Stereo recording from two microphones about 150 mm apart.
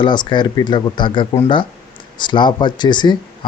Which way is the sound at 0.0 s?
30° left (ahead or behind).